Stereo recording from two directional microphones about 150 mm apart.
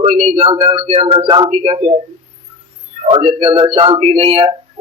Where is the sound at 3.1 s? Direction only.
40° right (ahead or behind).